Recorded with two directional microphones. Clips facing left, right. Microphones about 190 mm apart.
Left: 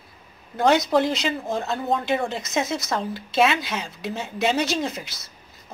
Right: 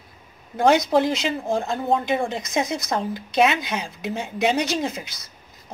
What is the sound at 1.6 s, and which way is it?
Speech, 15° right (ahead or behind).